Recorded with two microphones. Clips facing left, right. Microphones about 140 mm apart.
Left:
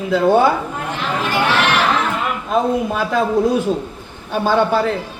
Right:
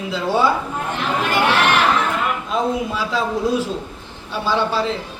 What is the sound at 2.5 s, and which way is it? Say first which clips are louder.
A man's voice: left 6 dB; 55° left (ahead or behind).